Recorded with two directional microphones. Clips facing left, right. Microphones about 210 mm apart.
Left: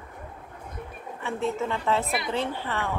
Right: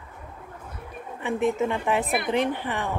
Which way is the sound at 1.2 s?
15° right (ahead or behind).